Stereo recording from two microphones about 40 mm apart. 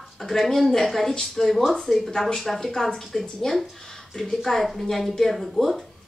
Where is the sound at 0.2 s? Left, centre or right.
Centre.